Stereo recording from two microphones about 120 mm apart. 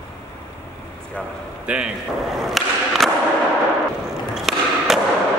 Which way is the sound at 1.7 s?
10° right (ahead or behind).